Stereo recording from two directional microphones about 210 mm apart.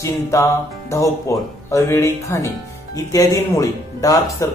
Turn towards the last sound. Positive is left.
turn(degrees=15)  # may be behind; listen again after turning